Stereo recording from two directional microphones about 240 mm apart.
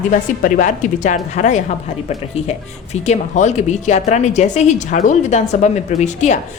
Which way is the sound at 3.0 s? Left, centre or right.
Left.